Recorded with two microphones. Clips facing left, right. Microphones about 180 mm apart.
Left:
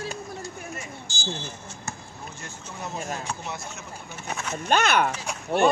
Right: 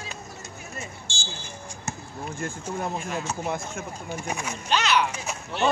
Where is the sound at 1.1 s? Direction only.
30° right (ahead or behind).